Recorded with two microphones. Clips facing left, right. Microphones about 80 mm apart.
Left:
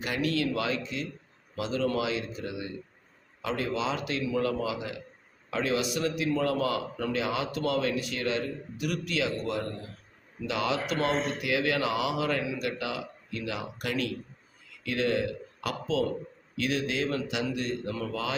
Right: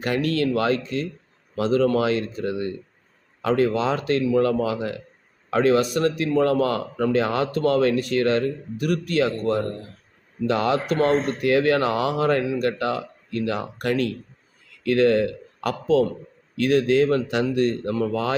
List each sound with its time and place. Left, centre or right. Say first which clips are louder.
0.0 s speech: right 6 dB; right